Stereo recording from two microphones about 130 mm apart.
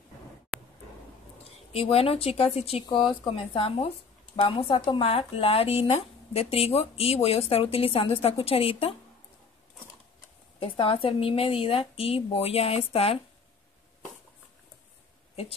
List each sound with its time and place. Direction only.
1.7 s speech: 50° left (ahead or behind)
10.6 s speech: 45° left (ahead or behind)